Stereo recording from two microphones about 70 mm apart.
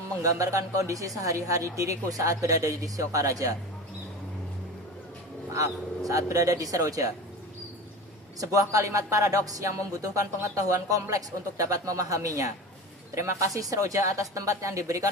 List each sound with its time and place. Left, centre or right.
0.2 s a woman's voice: right
5.5 s a woman's voice: right
8.4 s a woman's voice: right